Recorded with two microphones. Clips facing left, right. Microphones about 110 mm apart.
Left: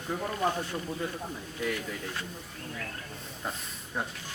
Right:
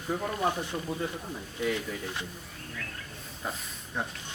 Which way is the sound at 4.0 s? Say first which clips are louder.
Even; 5° left (ahead or behind).